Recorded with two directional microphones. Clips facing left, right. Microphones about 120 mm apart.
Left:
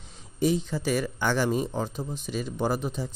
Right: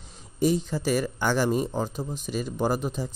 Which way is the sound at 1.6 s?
10° right (ahead or behind).